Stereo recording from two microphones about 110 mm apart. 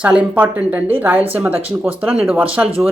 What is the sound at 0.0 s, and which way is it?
Speech, 10° right (ahead or behind).